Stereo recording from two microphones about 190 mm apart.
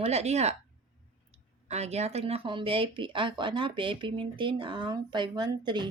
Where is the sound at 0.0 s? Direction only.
35° right (ahead or behind).